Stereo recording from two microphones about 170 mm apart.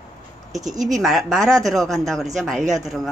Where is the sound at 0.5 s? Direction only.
Centre (ahead or behind).